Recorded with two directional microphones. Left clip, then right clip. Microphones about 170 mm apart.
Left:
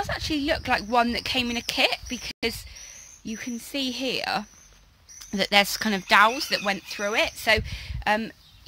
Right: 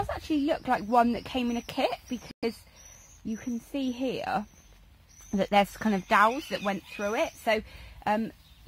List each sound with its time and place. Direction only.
0.3 s speech: 20° right (ahead or behind)
0.8 s speech: 5° right (ahead or behind)